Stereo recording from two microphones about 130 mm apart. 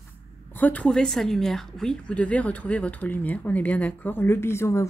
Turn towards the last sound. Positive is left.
turn(degrees=20)  # may be behind; listen again after turning